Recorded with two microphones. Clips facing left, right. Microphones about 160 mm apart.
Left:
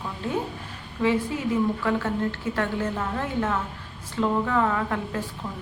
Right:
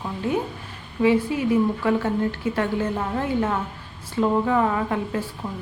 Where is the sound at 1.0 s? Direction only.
10° right (ahead or behind).